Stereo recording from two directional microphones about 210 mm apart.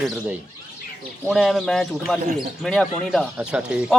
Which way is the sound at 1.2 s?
Centre (ahead or behind).